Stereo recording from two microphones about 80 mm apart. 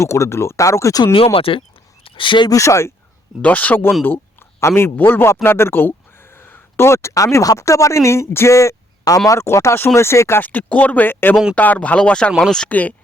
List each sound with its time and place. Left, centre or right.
0.0 s speech: left
1.5 s speech: left
2.5 s speech: left
3.4 s speech: centre
4.0 s a sound: left
4.6 s speech: left
10.4 s speech: centre